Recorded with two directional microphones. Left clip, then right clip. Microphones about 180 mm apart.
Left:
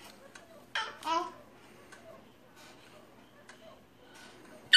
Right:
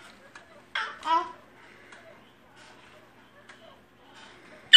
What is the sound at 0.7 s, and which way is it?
Babbling, 5° right (ahead or behind).